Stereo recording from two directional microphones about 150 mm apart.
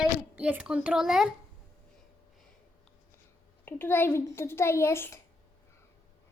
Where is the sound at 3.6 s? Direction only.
15° left (ahead or behind).